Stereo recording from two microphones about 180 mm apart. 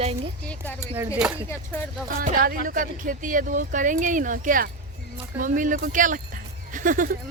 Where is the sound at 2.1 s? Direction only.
55° right (ahead or behind).